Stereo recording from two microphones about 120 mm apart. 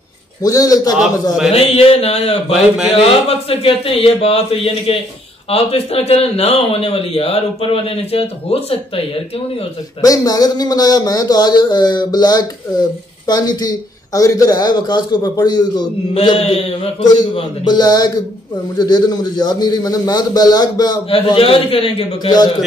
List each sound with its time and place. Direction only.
0.4 s a man's voice: 30° left (ahead or behind)
1.5 s a man's voice: 55° left (ahead or behind)
10.0 s a man's voice: 30° left (ahead or behind)
16.2 s speech: 50° left (ahead or behind)
17.0 s a man's voice: 35° left (ahead or behind)
21.1 s speech: 50° left (ahead or behind)